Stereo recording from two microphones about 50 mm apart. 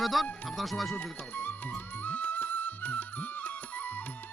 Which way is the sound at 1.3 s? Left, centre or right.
Left.